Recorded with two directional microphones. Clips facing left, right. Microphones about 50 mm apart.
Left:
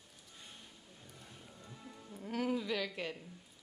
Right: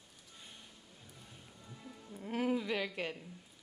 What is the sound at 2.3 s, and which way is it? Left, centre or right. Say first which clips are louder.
Speech: right 1 dB; centre.